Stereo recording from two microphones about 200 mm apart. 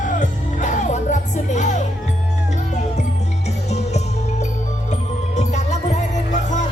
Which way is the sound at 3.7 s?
35° left (ahead or behind).